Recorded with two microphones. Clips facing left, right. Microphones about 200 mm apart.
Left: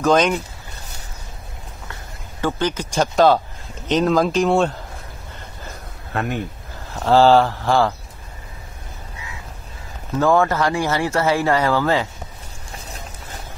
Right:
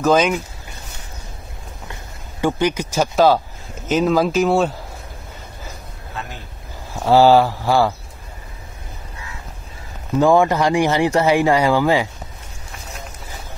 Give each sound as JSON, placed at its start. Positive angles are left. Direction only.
{"t": 0.0, "sound": "speech", "side_deg": -5}
{"t": 2.4, "sound": "speech", "side_deg": -10}
{"t": 6.1, "sound": "speech", "side_deg": 60}
{"t": 6.9, "sound": "speech", "side_deg": -10}
{"t": 10.1, "sound": "speech", "side_deg": -15}